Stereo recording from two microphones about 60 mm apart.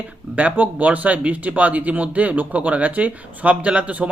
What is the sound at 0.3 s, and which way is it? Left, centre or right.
Speech, right.